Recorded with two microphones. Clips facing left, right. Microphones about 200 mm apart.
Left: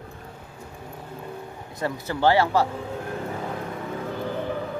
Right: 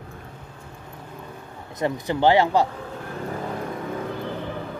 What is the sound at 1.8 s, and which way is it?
Speech, 20° right (ahead or behind).